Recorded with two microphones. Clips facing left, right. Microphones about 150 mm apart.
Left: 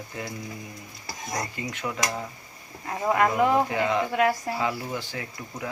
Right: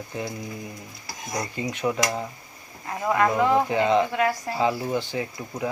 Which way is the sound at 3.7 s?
20° right (ahead or behind).